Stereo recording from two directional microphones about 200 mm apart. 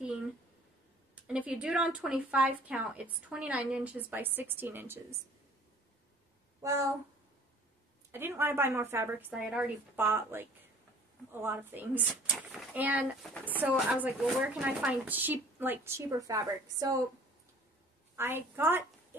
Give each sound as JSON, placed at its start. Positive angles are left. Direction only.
{"t": 1.1, "sound": "a woman's voice", "side_deg": -5}
{"t": 6.6, "sound": "a woman's voice", "side_deg": -15}
{"t": 8.1, "sound": "a woman's voice", "side_deg": -10}
{"t": 18.1, "sound": "a woman's voice", "side_deg": -10}